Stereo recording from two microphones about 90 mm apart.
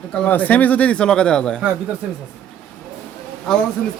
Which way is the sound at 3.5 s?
5° left (ahead or behind).